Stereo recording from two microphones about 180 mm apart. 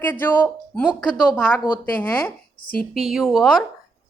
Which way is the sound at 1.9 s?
10° left (ahead or behind).